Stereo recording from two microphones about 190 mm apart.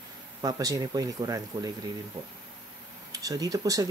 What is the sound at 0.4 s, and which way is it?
Speech, 20° right (ahead or behind).